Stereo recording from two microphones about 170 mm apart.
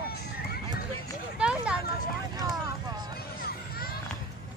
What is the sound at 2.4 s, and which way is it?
Vehicle, 25° right (ahead or behind).